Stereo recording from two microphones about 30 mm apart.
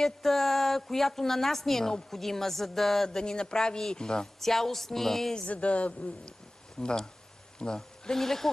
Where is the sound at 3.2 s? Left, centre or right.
Left.